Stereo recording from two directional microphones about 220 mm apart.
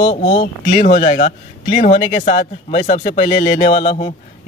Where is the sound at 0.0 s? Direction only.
30° left (ahead or behind).